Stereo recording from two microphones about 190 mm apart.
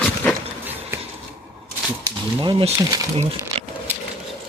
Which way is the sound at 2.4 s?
25° right (ahead or behind).